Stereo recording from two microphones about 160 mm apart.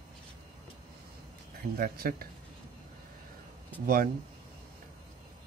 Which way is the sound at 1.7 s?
70° right (ahead or behind).